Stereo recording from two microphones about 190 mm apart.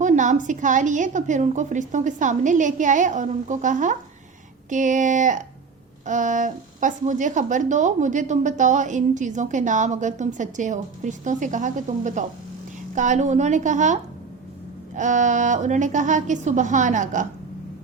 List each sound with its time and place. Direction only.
0.0 s speech: 40° right (ahead or behind)